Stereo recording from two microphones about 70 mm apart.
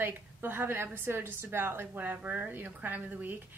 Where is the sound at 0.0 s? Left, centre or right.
Right.